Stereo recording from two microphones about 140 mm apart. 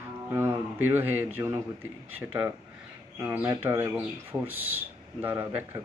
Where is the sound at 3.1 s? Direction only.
10° right (ahead or behind).